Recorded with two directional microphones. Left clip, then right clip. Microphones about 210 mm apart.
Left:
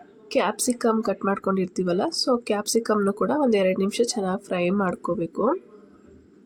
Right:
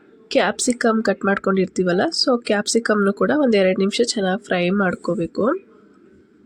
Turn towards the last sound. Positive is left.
turn(degrees=-20)  # may be behind; listen again after turning